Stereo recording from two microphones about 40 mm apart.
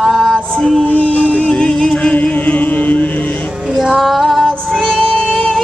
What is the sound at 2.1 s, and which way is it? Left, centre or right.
Music, left.